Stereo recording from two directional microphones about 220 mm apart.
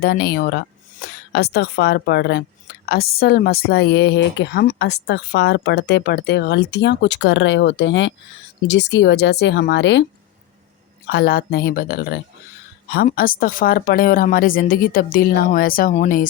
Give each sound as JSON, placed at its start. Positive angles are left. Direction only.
{"t": 0.0, "sound": "a woman's voice", "side_deg": 45}
{"t": 11.1, "sound": "a woman's voice", "side_deg": 45}